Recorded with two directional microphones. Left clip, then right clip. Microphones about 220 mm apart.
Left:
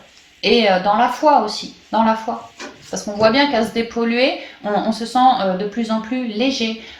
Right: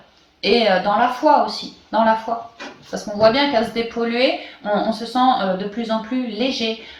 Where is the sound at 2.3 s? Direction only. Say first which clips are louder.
Right 1 dB; 35° left (ahead or behind).